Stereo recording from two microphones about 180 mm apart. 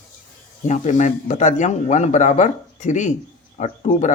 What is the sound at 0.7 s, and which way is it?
Speech, 40° left (ahead or behind).